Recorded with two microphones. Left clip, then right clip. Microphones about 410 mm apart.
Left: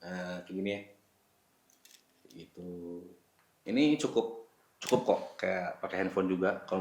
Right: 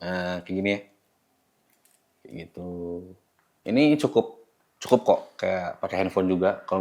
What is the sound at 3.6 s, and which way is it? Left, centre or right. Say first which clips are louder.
Speech: right 8 dB; right.